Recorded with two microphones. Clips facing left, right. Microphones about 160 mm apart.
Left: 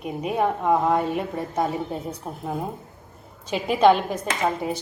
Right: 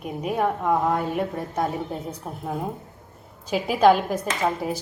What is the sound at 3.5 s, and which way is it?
Speech, 5° right (ahead or behind).